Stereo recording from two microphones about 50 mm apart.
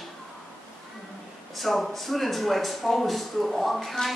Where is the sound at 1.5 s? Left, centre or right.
Centre.